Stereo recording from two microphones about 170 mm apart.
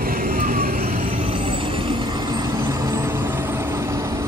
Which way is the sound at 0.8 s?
35° right (ahead or behind).